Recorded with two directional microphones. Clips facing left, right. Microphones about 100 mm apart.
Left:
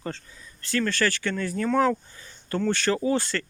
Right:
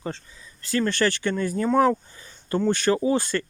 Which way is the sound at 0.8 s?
20° right (ahead or behind).